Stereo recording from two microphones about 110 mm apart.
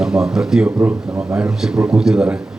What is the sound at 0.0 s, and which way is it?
Speech, 5° right (ahead or behind).